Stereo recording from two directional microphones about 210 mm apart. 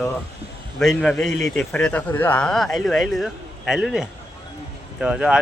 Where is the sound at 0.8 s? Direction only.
Centre (ahead or behind).